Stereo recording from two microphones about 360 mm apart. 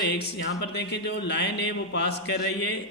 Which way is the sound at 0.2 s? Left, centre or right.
Left.